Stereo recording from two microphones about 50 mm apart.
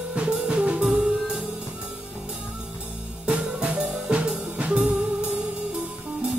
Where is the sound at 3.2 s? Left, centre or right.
Right.